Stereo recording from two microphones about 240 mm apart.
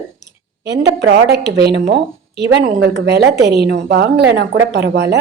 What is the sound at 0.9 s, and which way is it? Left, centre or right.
A woman's voice, right.